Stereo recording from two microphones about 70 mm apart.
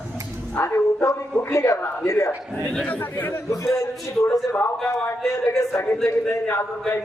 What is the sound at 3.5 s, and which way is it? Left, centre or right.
Speech, left.